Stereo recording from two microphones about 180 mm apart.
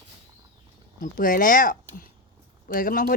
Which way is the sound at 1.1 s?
50° left (ahead or behind).